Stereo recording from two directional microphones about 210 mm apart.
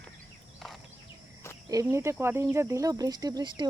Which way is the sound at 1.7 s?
15° right (ahead or behind).